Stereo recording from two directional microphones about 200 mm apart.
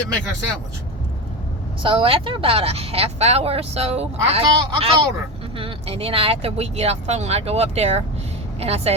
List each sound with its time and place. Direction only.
1.8 s speech: 25° right (ahead or behind)